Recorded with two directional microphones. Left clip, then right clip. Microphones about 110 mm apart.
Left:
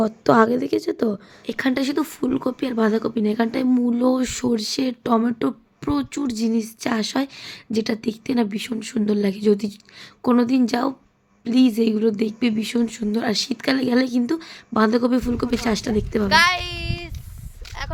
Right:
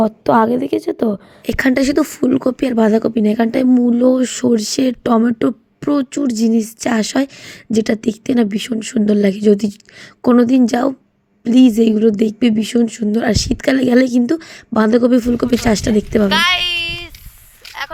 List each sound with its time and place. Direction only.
0.0 s a woman's voice: 25° right (ahead or behind)
1.5 s speech: 55° right (ahead or behind)
3.8 s speech: 25° right (ahead or behind); by 16.3 s 45° right (ahead or behind)
16.3 s speech: centre (ahead or behind)
16.6 s a sound: 10° left (ahead or behind)